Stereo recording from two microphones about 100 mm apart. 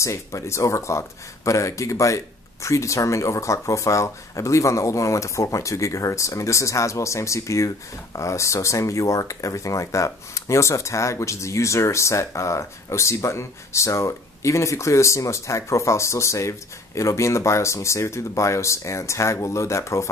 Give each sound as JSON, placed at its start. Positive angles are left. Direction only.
{"t": 0.0, "sound": "speech", "side_deg": 30}